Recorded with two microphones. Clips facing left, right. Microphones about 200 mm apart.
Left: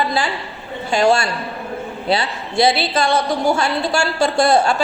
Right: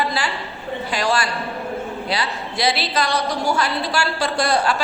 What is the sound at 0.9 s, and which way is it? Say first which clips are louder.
A woman's voice: left 7 dB; 25° left (ahead or behind).